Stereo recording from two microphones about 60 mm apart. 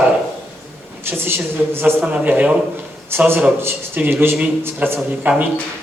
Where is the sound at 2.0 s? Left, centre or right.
Right.